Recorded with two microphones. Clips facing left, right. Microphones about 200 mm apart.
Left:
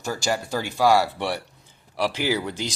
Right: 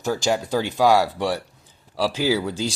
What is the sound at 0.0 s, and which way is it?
Speech, 15° right (ahead or behind).